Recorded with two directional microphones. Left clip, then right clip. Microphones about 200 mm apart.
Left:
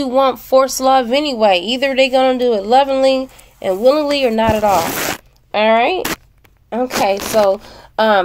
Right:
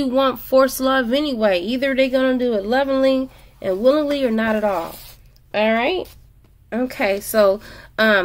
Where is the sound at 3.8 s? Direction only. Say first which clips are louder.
Left 4 dB; 10° right (ahead or behind).